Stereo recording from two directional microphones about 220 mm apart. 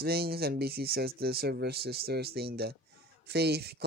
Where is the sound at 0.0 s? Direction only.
45° right (ahead or behind).